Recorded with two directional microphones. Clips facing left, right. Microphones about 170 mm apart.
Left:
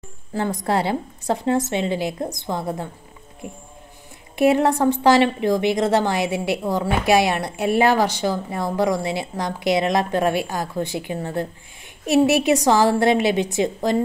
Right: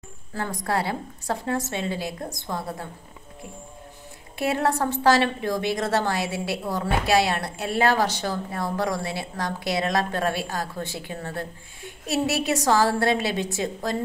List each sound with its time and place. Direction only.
0.3 s a woman's voice: 20° left (ahead or behind)
4.4 s a woman's voice: 15° left (ahead or behind)